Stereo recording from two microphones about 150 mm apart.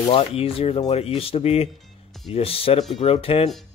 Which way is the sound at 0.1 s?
40° left (ahead or behind).